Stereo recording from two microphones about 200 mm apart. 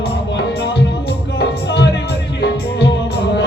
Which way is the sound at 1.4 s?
60° left (ahead or behind).